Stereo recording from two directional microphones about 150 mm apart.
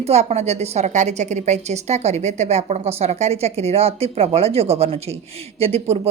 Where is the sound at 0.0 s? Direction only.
45° right (ahead or behind).